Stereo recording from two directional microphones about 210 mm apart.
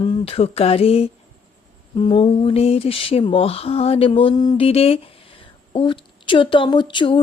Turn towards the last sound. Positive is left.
turn(degrees=25)  # may be behind; listen again after turning